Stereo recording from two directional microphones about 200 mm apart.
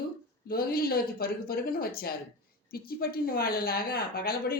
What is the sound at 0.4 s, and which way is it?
A woman's voice, 50° left (ahead or behind).